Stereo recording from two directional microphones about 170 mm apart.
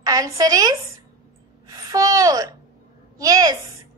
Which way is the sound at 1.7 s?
20° right (ahead or behind).